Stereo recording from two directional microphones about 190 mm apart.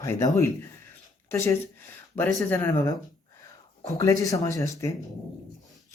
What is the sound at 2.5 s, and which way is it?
Speech, 15° left (ahead or behind).